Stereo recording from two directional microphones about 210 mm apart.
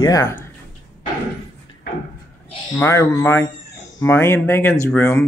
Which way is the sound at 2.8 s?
15° left (ahead or behind).